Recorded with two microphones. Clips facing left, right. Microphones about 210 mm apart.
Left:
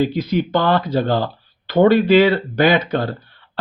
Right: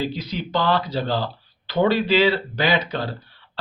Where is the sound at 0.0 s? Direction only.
55° left (ahead or behind).